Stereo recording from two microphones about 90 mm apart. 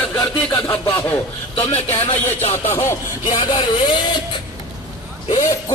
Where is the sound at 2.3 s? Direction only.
30° left (ahead or behind).